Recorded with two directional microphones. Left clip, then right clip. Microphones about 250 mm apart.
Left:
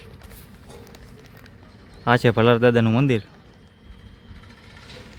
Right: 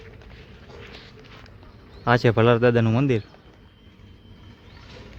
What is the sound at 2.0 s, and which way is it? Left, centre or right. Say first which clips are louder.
Speech: left 1 dB; centre.